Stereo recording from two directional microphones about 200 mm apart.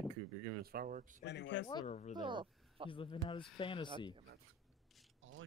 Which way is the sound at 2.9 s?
25° left (ahead or behind).